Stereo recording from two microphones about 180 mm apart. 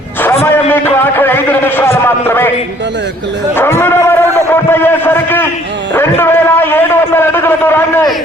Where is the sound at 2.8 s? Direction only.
75° right (ahead or behind).